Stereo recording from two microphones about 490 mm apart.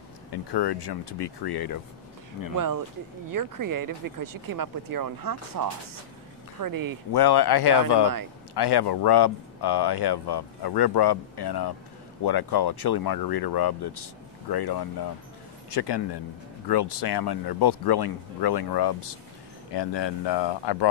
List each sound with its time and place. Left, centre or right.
0.3 s speech: left
2.5 s speech: right
7.1 s speech: left